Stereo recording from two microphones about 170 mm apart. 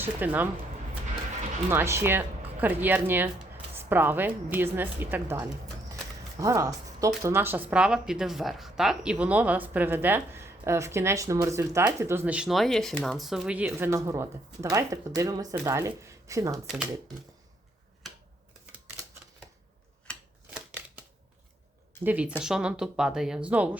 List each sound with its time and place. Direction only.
0.0 s speech: 10° right (ahead or behind)
1.7 s a woman's voice: 15° right (ahead or behind)
16.6 s a woman's voice: 5° right (ahead or behind)
20.5 s scissors: 10° right (ahead or behind)
22.0 s a woman's voice: 10° right (ahead or behind)